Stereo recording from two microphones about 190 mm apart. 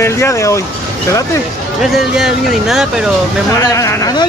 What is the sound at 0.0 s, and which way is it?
Speech, 15° left (ahead or behind).